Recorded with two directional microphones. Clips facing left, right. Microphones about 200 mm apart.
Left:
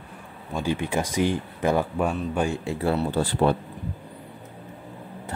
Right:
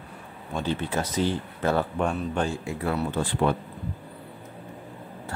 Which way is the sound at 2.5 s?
25° left (ahead or behind).